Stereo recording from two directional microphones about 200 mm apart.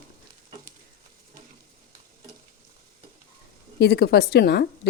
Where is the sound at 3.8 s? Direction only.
50° left (ahead or behind).